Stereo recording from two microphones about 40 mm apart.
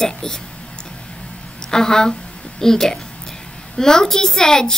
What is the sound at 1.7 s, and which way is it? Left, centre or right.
Child singing, centre.